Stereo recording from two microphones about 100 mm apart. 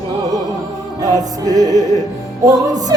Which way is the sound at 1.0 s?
40° right (ahead or behind).